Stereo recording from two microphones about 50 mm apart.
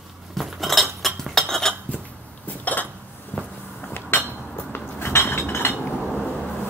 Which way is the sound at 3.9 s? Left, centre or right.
Left.